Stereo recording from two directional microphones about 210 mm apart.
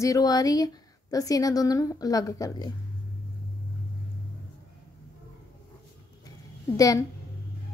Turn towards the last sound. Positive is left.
turn(degrees=15)  # may be behind; listen again after turning